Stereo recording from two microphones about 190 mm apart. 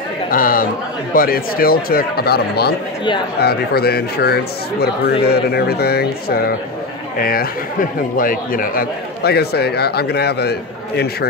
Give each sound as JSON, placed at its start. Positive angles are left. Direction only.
{"t": 0.3, "sound": "a man's voice", "side_deg": 50}